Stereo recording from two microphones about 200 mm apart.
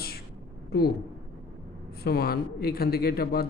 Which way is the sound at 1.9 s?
50° left (ahead or behind).